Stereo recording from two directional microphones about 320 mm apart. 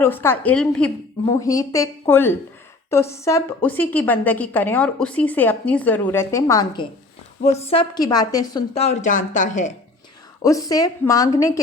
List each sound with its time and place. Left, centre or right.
0.0 s a woman's voice: centre; by 9.7 s left
10.4 s a woman's voice: centre